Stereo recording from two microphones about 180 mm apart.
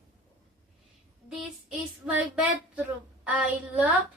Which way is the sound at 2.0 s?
10° right (ahead or behind).